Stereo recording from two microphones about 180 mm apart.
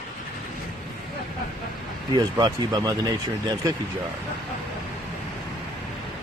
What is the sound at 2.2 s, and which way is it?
Speech, 20° right (ahead or behind).